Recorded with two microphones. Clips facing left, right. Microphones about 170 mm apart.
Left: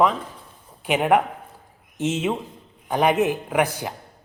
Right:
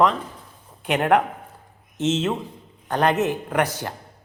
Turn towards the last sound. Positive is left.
turn(degrees=10)  # may be behind; listen again after turning